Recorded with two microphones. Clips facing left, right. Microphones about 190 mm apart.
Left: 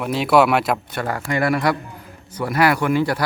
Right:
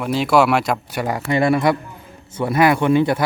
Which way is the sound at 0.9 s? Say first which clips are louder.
Right 3 dB; 15° right (ahead or behind).